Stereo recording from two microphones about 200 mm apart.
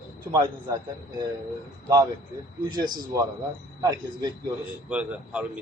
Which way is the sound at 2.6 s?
20° right (ahead or behind).